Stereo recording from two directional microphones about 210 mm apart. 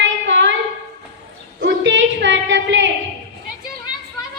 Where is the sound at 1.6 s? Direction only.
60° right (ahead or behind).